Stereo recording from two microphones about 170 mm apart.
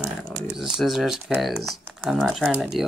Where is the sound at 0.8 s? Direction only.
Centre (ahead or behind).